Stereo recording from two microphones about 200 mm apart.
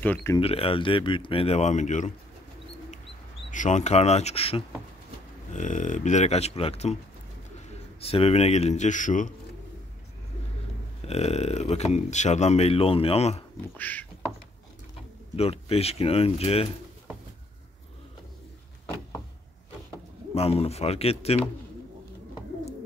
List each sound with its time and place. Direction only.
0.0 s speech: 10° left (ahead or behind)
0.4 s speech: 30° left (ahead or behind)
3.5 s speech: 35° left (ahead or behind)
8.0 s speech: 30° left (ahead or behind)
11.1 s speech: 30° left (ahead or behind)
13.7 s speech: 5° left (ahead or behind)
15.3 s speech: 30° left (ahead or behind)
20.3 s speech: 30° left (ahead or behind)